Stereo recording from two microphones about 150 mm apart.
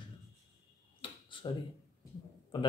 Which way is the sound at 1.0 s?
35° left (ahead or behind).